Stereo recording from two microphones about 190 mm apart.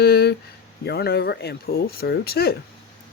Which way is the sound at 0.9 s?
60° left (ahead or behind).